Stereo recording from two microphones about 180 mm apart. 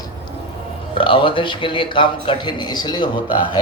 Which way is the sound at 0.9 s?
30° left (ahead or behind).